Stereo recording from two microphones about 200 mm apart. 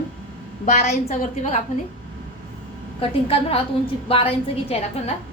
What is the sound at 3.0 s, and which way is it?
A woman's voice, 30° left (ahead or behind).